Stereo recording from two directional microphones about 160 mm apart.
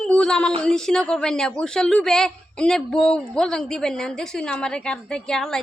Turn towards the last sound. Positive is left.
turn(degrees=5)  # may be behind; listen again after turning